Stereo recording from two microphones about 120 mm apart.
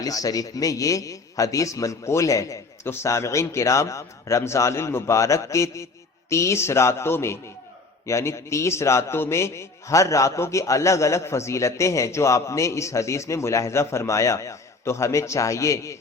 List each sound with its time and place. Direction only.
0.0 s a man's voice: 30° left (ahead or behind)